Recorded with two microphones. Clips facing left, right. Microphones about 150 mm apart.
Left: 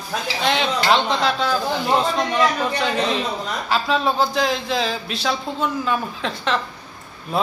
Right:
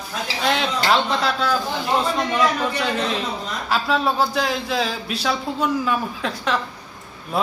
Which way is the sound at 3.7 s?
5° right (ahead or behind).